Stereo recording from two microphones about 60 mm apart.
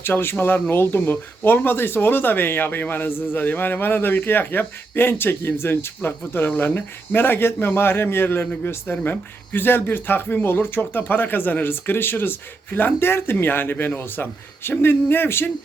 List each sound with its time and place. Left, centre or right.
0.0 s a man's voice: left